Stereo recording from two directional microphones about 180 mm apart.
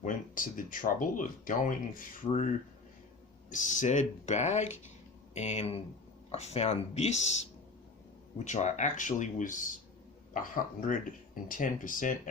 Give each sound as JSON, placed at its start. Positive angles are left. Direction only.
{"t": 0.0, "sound": "speech", "side_deg": 45}
{"t": 3.5, "sound": "speech", "side_deg": 45}
{"t": 8.4, "sound": "speech", "side_deg": 40}